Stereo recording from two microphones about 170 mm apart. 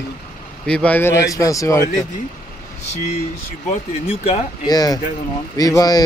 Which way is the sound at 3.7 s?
35° left (ahead or behind).